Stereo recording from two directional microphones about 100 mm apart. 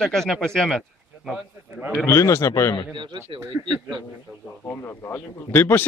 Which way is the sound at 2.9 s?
55° right (ahead or behind).